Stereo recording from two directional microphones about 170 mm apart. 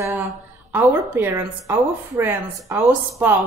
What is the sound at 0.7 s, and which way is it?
A woman's voice, 15° right (ahead or behind).